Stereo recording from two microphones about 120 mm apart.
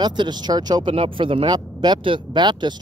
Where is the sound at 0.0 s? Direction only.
35° right (ahead or behind).